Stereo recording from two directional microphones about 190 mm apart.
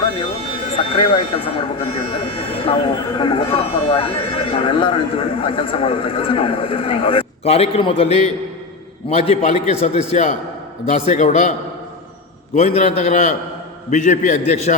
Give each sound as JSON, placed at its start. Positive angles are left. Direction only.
{"t": 0.2, "sound": "a sound", "side_deg": 30}
{"t": 2.2, "sound": "a man's voice", "side_deg": 25}
{"t": 12.5, "sound": "a man's voice", "side_deg": 35}